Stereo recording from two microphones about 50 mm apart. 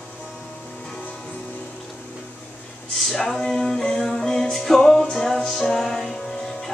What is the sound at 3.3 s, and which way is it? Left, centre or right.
Music, centre.